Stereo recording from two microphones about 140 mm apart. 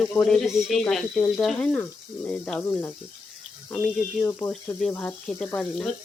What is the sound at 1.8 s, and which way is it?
Speech, 10° left (ahead or behind).